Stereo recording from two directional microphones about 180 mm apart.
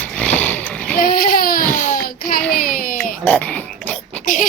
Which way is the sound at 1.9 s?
55° left (ahead or behind).